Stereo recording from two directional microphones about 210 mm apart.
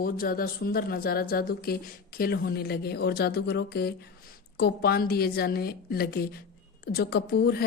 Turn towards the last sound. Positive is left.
turn(degrees=50)  # may be behind; listen again after turning